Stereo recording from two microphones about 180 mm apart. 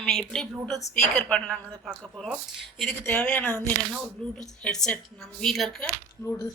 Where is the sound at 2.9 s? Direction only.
10° left (ahead or behind).